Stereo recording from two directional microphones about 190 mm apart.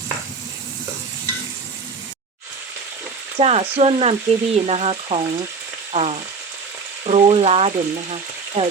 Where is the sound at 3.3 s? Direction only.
30° right (ahead or behind).